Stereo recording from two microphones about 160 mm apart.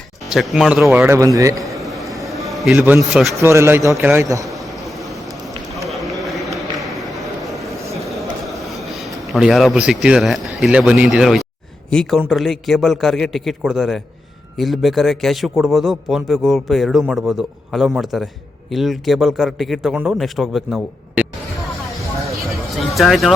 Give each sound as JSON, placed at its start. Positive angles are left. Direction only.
{"t": 0.3, "sound": "a man's voice", "side_deg": 0}
{"t": 1.8, "sound": "a sound", "side_deg": 0}
{"t": 2.7, "sound": "a man's voice", "side_deg": -10}
{"t": 3.1, "sound": "a man's voice", "side_deg": 0}
{"t": 3.4, "sound": "a man's voice", "side_deg": -15}
{"t": 5.9, "sound": "a sound", "side_deg": 0}
{"t": 11.9, "sound": "a man's voice", "side_deg": 5}
{"t": 23.0, "sound": "a man's voice", "side_deg": 0}